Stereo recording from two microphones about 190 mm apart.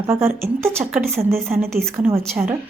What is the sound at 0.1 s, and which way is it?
Speech, 10° right (ahead or behind).